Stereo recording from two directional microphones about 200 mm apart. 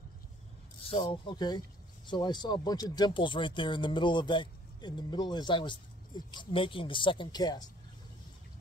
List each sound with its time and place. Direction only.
0.8 s speech: 25° left (ahead or behind)